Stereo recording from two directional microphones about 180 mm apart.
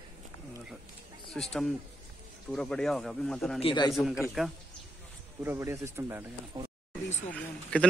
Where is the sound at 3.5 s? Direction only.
30° left (ahead or behind).